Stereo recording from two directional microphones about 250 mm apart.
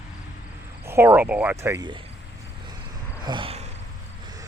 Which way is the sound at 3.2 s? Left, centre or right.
Centre.